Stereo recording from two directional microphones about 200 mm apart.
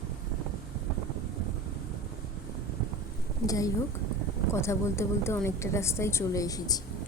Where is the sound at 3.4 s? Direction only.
15° left (ahead or behind).